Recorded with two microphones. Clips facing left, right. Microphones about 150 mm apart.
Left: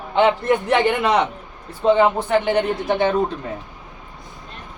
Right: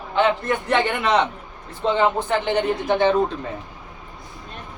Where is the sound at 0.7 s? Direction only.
10° left (ahead or behind).